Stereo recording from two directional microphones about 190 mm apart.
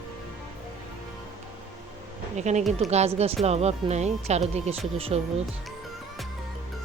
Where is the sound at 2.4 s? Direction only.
40° right (ahead or behind).